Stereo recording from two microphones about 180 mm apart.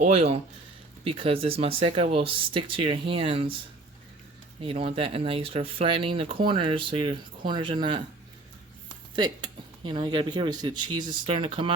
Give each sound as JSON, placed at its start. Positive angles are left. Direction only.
{"t": 0.0, "sound": "speech", "side_deg": -35}
{"t": 4.6, "sound": "speech", "side_deg": -30}
{"t": 9.1, "sound": "speech", "side_deg": -25}